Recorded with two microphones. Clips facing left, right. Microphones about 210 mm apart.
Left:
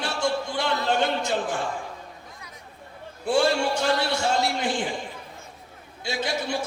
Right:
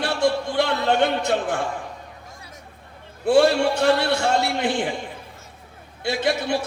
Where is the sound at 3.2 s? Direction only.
60° right (ahead or behind).